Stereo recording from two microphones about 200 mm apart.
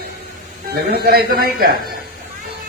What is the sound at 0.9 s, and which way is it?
Speech, 50° right (ahead or behind).